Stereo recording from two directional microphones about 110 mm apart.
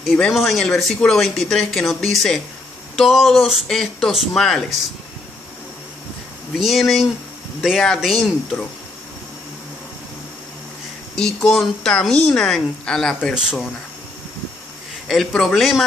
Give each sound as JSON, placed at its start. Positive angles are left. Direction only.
{"t": 0.0, "sound": "speech", "side_deg": 5}
{"t": 6.6, "sound": "speech", "side_deg": 0}
{"t": 11.1, "sound": "speech", "side_deg": 5}
{"t": 13.3, "sound": "speech", "side_deg": -5}
{"t": 15.0, "sound": "speech", "side_deg": 5}